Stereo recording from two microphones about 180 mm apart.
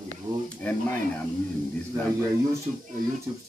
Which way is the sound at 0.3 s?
20° right (ahead or behind).